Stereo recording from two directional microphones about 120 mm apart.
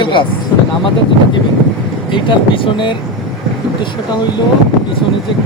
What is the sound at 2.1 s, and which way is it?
Speech, 45° left (ahead or behind).